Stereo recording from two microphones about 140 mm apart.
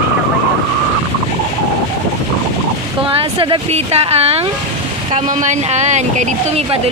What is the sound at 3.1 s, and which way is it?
Speech, 40° right (ahead or behind).